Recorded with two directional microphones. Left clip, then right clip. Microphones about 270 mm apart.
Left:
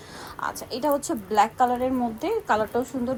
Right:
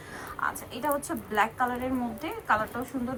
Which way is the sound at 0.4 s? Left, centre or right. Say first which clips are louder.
Left 4 dB; left.